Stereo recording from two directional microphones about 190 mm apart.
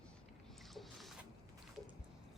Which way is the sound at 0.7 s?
Centre (ahead or behind).